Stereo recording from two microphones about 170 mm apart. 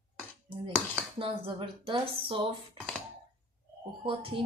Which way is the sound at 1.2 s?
30° right (ahead or behind).